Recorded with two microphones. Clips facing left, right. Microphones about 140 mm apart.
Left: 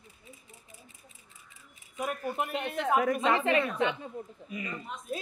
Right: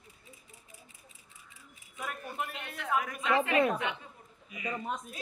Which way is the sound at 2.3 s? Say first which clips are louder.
Left 7 dB; 20° left (ahead or behind).